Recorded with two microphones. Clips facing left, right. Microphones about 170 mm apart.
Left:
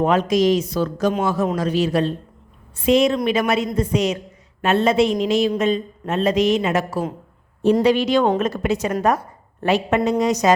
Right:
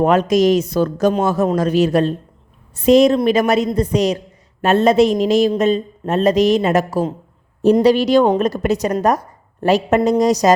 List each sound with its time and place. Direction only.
0.0 s a man's voice: 45° right (ahead or behind)